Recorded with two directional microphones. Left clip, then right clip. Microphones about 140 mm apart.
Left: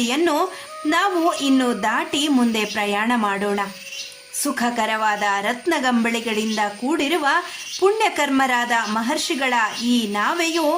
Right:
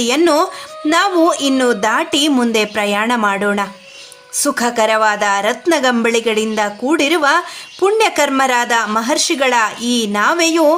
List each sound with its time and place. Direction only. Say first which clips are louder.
0.0 s a woman's voice: right 7 dB; 35° right (ahead or behind)